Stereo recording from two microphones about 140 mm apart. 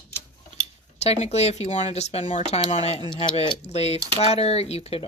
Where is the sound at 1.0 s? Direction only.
50° left (ahead or behind).